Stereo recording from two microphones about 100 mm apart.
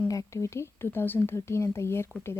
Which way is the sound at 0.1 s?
35° left (ahead or behind).